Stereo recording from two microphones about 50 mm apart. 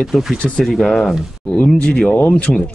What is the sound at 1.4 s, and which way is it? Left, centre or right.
Speech, left.